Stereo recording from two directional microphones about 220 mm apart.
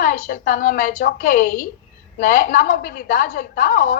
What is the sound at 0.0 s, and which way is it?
A woman's voice, 40° left (ahead or behind).